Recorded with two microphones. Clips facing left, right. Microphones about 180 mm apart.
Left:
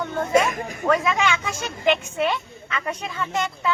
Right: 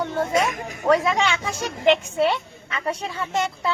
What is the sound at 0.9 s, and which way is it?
Speech, 35° right (ahead or behind).